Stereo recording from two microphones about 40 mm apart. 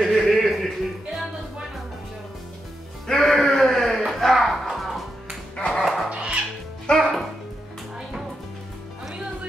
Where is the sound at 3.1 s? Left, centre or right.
Centre.